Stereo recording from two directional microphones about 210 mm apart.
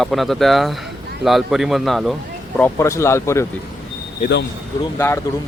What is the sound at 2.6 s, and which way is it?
Speech, 15° left (ahead or behind).